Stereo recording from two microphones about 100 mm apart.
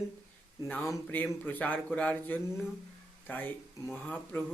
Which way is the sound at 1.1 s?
15° left (ahead or behind).